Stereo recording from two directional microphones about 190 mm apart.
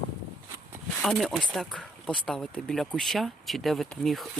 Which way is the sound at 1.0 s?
Centre (ahead or behind).